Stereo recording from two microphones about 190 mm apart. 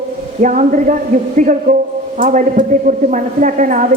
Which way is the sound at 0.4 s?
40° right (ahead or behind).